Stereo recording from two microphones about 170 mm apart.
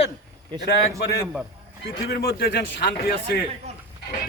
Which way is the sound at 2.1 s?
65° left (ahead or behind).